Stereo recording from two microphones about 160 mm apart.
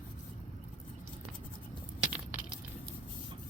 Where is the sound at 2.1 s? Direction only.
5° right (ahead or behind).